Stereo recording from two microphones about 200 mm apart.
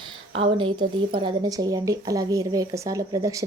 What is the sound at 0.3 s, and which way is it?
Speech, 25° right (ahead or behind).